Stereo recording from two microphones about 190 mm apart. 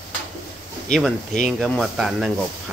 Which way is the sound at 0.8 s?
5° left (ahead or behind).